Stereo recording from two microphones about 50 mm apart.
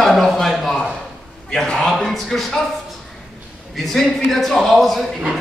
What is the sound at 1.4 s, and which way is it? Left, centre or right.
A man's voice, centre.